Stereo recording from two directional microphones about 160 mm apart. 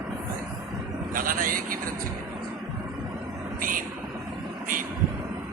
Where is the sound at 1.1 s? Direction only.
60° right (ahead or behind).